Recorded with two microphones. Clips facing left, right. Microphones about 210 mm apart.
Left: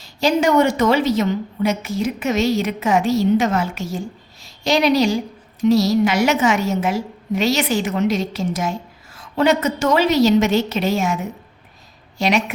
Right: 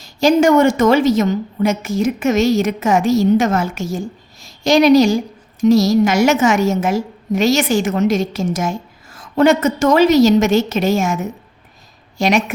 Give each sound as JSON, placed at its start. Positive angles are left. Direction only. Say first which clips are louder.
{"t": 0.0, "sound": "a woman's voice", "louder": "right 5 dB", "side_deg": -45}